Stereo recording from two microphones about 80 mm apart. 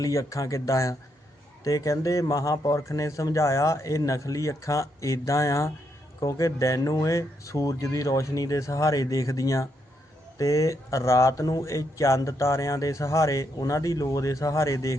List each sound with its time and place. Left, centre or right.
0.0 s speech: left